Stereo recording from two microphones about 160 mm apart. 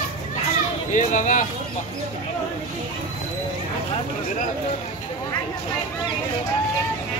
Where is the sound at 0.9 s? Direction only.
50° left (ahead or behind).